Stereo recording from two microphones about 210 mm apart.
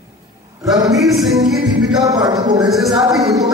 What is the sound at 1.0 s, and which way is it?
Music, centre (ahead or behind).